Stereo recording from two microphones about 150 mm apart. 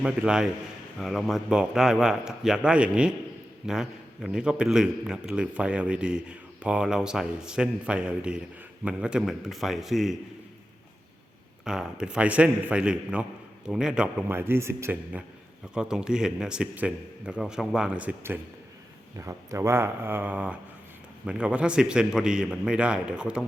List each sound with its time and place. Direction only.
0.0 s a man's voice: 5° right (ahead or behind)
11.6 s a man's voice: 5° right (ahead or behind)
15.7 s a man's voice: 5° right (ahead or behind)